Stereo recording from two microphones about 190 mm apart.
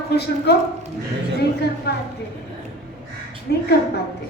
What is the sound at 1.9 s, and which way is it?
Speech, 60° left (ahead or behind).